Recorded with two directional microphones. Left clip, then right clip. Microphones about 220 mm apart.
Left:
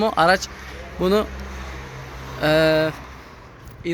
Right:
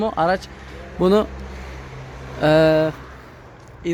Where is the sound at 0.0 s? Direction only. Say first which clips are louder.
Left 3 dB; 5° right (ahead or behind).